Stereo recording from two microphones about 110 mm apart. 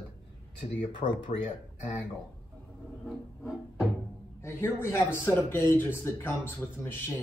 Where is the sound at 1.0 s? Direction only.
70° left (ahead or behind).